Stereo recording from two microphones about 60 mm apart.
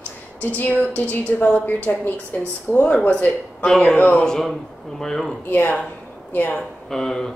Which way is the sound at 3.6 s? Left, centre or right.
Centre.